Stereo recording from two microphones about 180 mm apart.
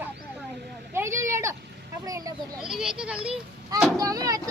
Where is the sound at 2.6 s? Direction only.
5° right (ahead or behind).